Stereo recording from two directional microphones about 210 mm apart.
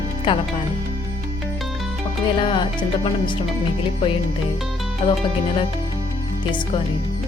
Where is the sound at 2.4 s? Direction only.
25° left (ahead or behind).